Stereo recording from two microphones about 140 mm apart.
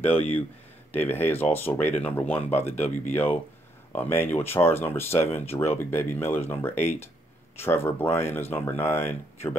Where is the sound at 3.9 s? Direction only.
15° left (ahead or behind).